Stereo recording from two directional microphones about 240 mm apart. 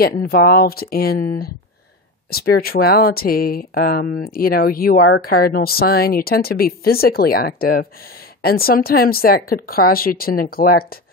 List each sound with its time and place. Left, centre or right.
0.0 s speech: left